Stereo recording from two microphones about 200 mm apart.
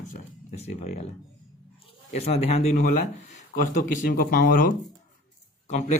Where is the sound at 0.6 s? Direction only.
35° left (ahead or behind).